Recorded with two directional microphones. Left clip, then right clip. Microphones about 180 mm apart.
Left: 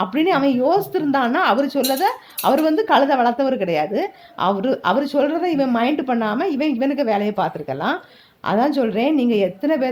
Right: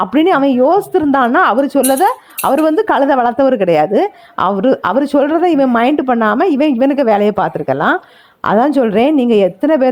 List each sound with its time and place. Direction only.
0.0 s a woman's voice: 40° right (ahead or behind)